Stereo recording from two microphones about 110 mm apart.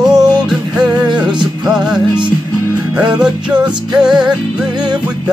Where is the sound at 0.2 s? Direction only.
40° right (ahead or behind).